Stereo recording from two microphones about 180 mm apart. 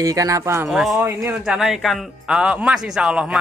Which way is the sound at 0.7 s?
Centre (ahead or behind).